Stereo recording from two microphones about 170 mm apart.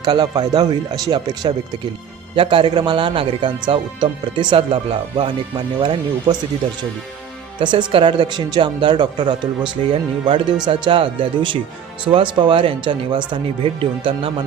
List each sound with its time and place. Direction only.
0.0 s speech: 25° right (ahead or behind)
7.6 s speech: 30° right (ahead or behind)